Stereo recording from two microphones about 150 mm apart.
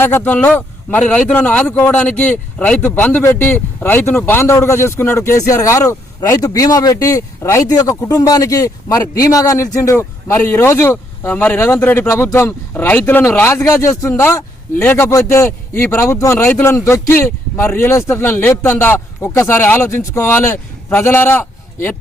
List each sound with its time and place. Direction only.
0.0 s speech: 15° left (ahead or behind)